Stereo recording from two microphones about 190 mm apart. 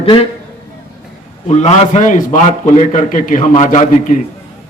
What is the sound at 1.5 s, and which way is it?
A man's voice, 35° left (ahead or behind).